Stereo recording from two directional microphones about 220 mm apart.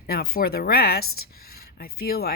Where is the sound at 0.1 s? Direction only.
45° left (ahead or behind).